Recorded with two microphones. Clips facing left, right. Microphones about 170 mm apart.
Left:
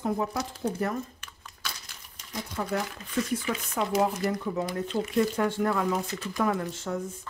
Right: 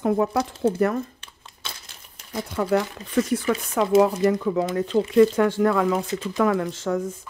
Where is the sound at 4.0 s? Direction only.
90° right.